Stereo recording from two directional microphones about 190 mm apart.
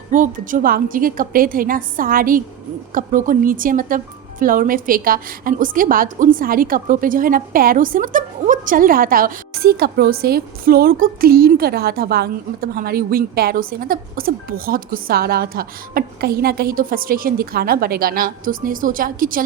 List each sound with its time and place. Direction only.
0.1 s a woman's voice: 45° right (ahead or behind)